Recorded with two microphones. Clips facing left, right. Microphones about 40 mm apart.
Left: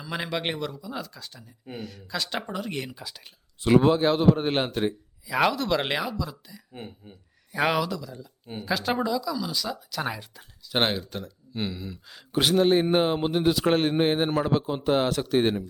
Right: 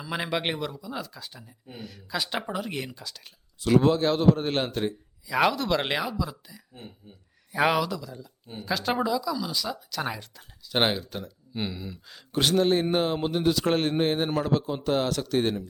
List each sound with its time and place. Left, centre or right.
0.0 s speech: centre
2.9 s a man's voice: centre
5.2 s speech: centre
6.7 s speech: left
7.5 s a man's voice: centre